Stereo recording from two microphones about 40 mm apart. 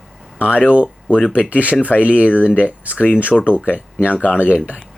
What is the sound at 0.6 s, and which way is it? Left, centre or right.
Speech, right.